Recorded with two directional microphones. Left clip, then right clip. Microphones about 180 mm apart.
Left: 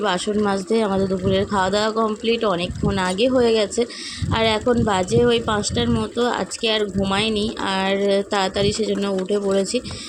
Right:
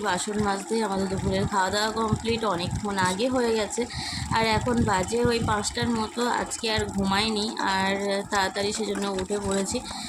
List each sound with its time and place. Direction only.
0.0 s speech: 30° left (ahead or behind)